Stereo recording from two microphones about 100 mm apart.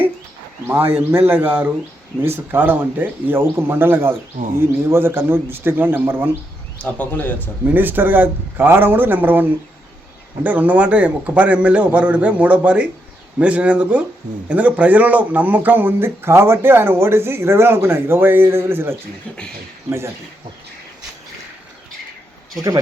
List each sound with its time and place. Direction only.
0.9 s speech: 20° right (ahead or behind)
6.7 s a man's voice: 15° left (ahead or behind)
7.7 s a man's voice: 20° right (ahead or behind)